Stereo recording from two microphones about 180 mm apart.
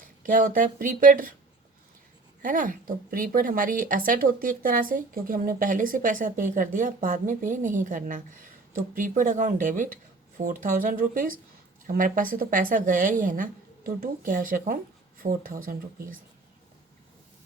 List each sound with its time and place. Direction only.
0.0 s speech: 50° right (ahead or behind)
2.4 s speech: 50° right (ahead or behind)